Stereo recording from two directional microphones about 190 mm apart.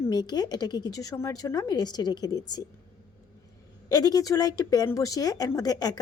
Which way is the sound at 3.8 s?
20° left (ahead or behind).